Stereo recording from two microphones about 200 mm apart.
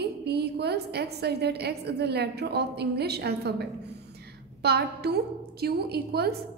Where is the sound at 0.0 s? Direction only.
55° right (ahead or behind).